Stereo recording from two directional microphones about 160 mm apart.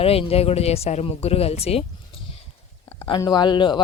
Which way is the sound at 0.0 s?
40° left (ahead or behind).